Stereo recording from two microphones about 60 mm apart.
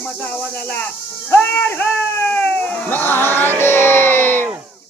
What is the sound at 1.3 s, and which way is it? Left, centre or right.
Speech, left.